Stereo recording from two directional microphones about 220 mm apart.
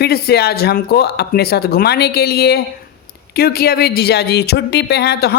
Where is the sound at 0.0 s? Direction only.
45° left (ahead or behind).